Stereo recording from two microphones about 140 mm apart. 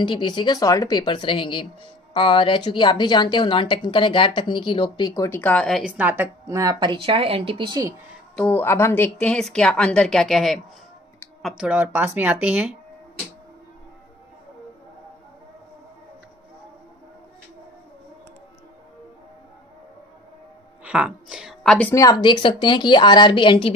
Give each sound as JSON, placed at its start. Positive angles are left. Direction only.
{"t": 0.0, "sound": "a woman's voice", "side_deg": 35}
{"t": 5.9, "sound": "a woman's voice", "side_deg": -10}
{"t": 8.4, "sound": "a woman's voice", "side_deg": 15}
{"t": 20.8, "sound": "a woman's voice", "side_deg": -5}
{"t": 22.2, "sound": "a woman's voice", "side_deg": 35}